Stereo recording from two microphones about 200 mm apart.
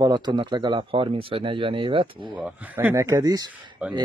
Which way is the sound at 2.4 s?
10° right (ahead or behind).